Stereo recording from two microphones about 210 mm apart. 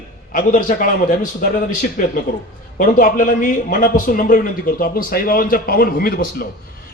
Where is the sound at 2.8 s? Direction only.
40° left (ahead or behind).